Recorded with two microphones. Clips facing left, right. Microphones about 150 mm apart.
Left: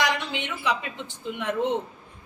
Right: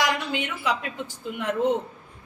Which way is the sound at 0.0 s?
5° right (ahead or behind).